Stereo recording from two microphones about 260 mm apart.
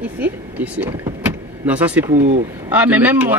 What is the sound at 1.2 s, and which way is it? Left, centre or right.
Vehicle, centre.